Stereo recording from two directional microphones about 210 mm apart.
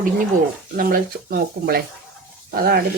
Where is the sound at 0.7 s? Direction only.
45° right (ahead or behind).